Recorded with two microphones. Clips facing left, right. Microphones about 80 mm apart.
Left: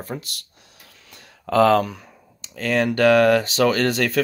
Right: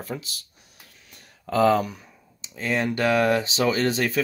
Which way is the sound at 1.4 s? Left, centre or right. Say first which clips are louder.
Left 4 dB; left.